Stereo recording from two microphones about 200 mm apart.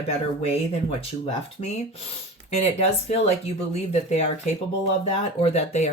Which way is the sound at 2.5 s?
30° left (ahead or behind).